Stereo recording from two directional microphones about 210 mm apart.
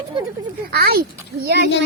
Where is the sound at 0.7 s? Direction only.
45° right (ahead or behind).